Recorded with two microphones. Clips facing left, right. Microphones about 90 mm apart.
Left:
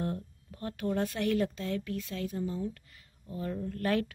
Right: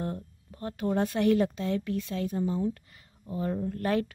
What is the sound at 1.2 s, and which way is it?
A woman's voice, 25° right (ahead or behind).